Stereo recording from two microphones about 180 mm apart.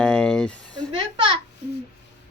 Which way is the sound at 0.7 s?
25° right (ahead or behind).